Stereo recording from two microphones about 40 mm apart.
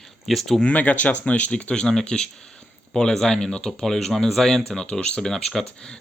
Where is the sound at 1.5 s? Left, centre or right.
Left; by 4.7 s centre.